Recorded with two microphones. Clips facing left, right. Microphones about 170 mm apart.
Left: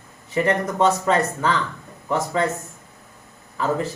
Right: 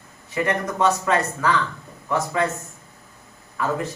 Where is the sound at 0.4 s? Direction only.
25° left (ahead or behind).